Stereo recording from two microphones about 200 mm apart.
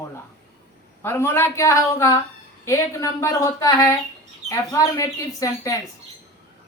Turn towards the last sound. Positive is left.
turn(degrees=15)  # may be behind; listen again after turning